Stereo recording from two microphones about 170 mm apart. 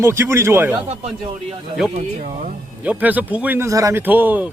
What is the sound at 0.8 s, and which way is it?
Speech, 40° right (ahead or behind).